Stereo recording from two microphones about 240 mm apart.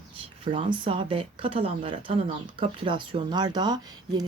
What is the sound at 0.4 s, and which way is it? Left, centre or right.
A woman's voice, right.